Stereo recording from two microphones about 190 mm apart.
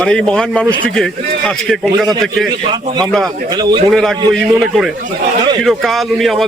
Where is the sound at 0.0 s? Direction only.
5° left (ahead or behind).